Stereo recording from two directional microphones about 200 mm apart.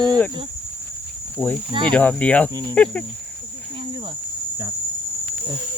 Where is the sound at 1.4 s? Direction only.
10° left (ahead or behind).